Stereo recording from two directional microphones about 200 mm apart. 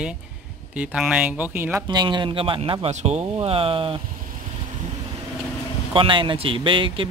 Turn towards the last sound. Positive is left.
turn(degrees=-25)  # may be behind; listen again after turning